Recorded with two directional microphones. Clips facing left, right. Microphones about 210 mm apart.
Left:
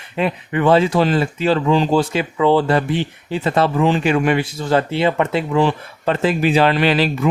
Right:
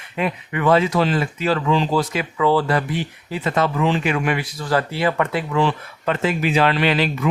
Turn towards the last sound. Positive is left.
turn(degrees=35)  # may be behind; listen again after turning